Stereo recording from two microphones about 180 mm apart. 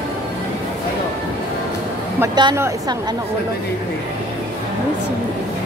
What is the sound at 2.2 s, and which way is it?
Speech, 20° right (ahead or behind).